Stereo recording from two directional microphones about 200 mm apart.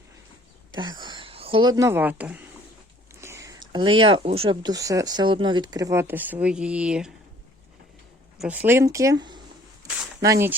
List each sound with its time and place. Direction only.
0.7 s speech: 20° right (ahead or behind); by 7.1 s 5° right (ahead or behind)
8.4 s speech: 10° right (ahead or behind)